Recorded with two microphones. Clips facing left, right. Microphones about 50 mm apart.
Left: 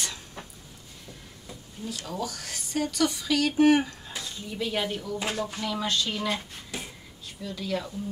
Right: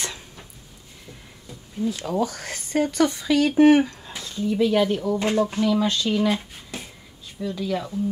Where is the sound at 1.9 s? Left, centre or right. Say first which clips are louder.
Right 8 dB; right.